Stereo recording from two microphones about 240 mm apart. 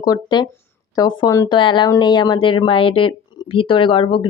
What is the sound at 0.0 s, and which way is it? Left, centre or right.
Speech, centre.